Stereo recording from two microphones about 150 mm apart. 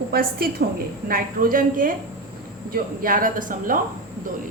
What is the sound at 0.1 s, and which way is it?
Speech, 90° right.